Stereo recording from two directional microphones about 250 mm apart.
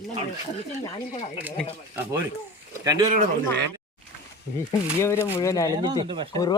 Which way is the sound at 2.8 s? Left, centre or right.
Centre.